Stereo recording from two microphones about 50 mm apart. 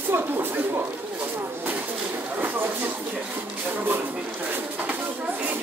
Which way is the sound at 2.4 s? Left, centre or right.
Right.